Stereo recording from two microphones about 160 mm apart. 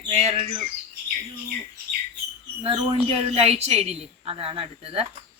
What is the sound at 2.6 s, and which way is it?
A woman's voice, 35° right (ahead or behind).